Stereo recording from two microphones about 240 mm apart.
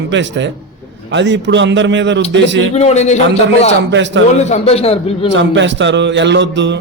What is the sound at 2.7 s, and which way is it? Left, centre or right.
Speech, left.